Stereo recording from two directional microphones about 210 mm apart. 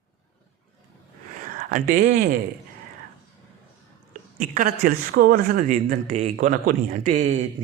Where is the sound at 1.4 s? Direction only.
40° right (ahead or behind).